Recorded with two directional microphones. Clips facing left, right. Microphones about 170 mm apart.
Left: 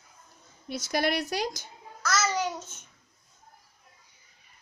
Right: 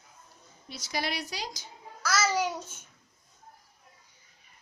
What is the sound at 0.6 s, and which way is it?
Speech, 50° left (ahead or behind).